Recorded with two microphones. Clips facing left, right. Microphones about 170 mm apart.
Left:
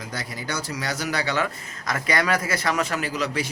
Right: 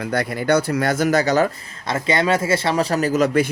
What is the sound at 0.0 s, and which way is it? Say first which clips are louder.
Speech: right 11 dB; 60° right (ahead or behind).